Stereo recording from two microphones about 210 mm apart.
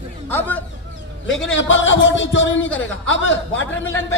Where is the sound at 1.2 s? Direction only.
65° left (ahead or behind).